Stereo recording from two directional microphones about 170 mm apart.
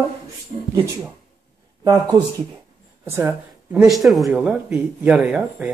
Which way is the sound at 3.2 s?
5° right (ahead or behind).